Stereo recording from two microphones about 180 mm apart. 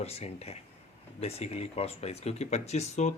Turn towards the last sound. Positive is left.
turn(degrees=40)  # may be behind; listen again after turning